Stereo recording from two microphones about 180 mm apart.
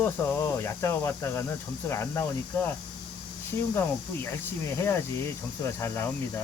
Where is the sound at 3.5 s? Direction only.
10° left (ahead or behind).